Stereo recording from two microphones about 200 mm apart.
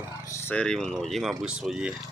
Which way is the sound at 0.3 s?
10° left (ahead or behind).